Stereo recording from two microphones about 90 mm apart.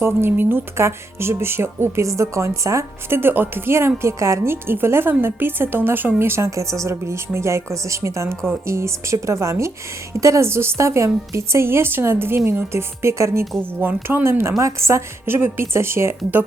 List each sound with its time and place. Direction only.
0.0 s a woman's voice: 25° right (ahead or behind)